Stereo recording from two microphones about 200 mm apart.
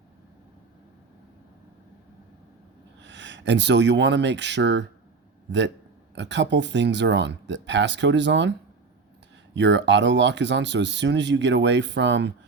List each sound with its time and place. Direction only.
3.0 s a man's voice: 65° right (ahead or behind)
9.6 s speech: 60° right (ahead or behind)